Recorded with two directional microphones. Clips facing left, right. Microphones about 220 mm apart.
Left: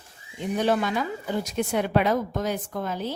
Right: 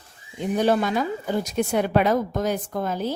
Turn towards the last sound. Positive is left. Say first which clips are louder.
# right 3 dB
turn(degrees=-40)  # may be behind; listen again after turning